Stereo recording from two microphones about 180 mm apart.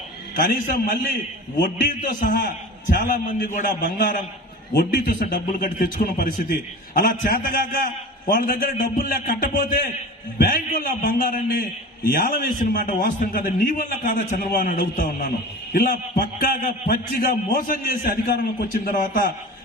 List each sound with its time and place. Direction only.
0.4 s a man's voice: 50° left (ahead or behind)